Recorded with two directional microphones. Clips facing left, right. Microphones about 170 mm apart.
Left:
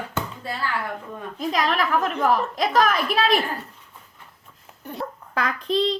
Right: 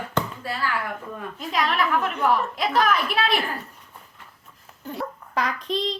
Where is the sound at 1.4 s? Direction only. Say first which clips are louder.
Left 2 dB; 40° left (ahead or behind).